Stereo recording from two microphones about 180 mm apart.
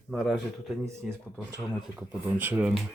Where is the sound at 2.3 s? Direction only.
10° right (ahead or behind).